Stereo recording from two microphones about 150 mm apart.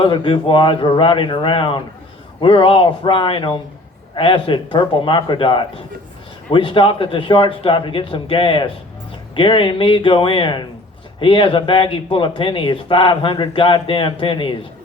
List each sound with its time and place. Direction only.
0.0 s speech: 35° left (ahead or behind)